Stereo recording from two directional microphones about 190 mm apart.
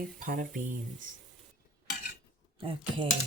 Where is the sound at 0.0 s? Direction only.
45° right (ahead or behind).